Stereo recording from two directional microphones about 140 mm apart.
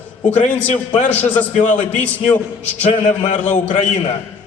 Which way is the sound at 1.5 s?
60° left (ahead or behind).